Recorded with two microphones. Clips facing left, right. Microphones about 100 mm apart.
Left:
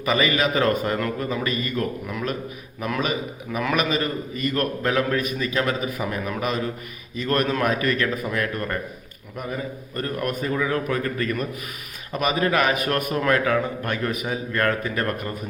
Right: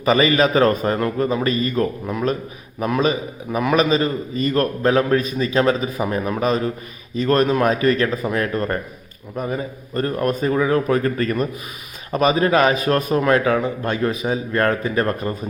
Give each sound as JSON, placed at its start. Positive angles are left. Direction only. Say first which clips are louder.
{"t": 0.0, "sound": "a man's voice", "louder": "right 6 dB", "side_deg": -35}